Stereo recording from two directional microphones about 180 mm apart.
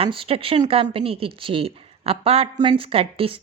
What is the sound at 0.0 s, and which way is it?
A woman's voice, 30° right (ahead or behind).